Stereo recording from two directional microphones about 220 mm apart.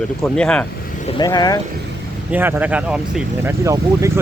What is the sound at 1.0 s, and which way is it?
Speech, 20° left (ahead or behind).